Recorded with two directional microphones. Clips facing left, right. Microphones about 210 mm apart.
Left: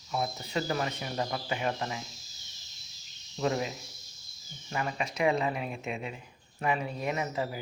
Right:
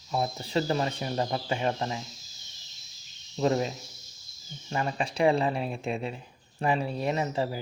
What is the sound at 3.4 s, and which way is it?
Speech, 35° right (ahead or behind).